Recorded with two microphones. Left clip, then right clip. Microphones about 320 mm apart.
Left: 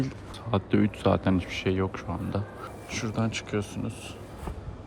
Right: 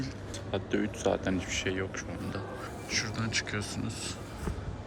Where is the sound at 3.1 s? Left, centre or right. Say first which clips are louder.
Left 2 dB; centre.